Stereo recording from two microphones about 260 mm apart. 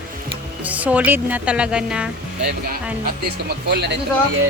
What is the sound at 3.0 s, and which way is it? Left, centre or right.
Speech, right.